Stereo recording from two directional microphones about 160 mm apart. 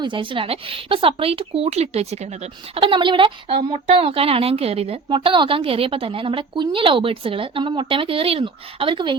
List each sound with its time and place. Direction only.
0.0 s a woman's voice: 30° right (ahead or behind)